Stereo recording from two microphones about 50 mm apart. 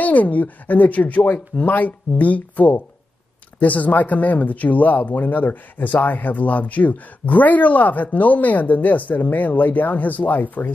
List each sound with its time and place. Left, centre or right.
0.0 s speech: left